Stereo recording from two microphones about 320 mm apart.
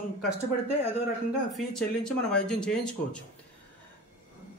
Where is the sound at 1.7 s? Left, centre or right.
Centre.